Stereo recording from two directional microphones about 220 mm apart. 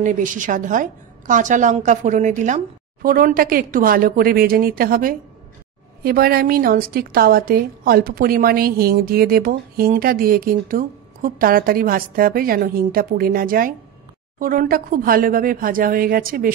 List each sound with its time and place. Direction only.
0.0 s a woman's voice: 35° right (ahead or behind)